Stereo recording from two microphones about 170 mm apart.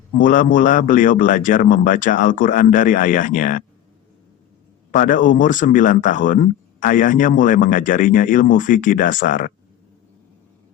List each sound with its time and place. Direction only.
0.2 s speech: 50° left (ahead or behind)
4.9 s speech: 50° left (ahead or behind)